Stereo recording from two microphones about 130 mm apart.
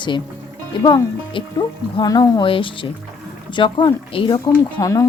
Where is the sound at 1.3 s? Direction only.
30° left (ahead or behind).